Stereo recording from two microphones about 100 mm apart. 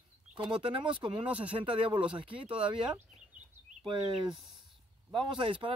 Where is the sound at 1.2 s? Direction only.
15° right (ahead or behind).